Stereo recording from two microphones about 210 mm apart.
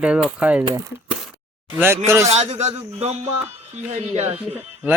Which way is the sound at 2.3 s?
30° right (ahead or behind).